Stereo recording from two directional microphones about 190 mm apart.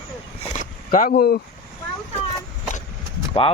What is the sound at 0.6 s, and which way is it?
Speech, 45° left (ahead or behind).